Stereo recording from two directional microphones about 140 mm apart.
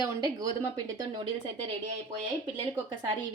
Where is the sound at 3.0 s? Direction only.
30° right (ahead or behind).